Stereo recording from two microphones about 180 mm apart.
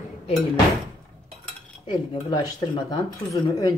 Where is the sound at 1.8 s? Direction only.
25° left (ahead or behind).